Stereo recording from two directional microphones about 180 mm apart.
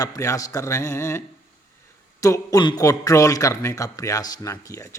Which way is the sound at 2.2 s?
20° left (ahead or behind).